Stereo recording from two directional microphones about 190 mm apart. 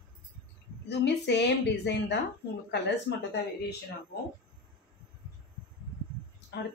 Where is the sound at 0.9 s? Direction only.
65° left (ahead or behind).